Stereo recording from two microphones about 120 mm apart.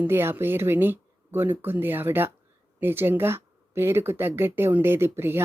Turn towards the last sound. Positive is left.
turn(degrees=-20)  # may be behind; listen again after turning